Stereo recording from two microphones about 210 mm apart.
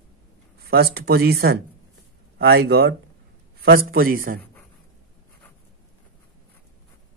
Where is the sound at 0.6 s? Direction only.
50° right (ahead or behind).